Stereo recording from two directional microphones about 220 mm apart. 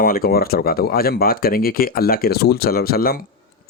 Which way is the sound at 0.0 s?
40° left (ahead or behind).